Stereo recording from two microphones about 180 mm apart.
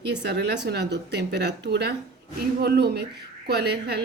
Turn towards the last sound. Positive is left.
turn(degrees=-65)  # may be behind; listen again after turning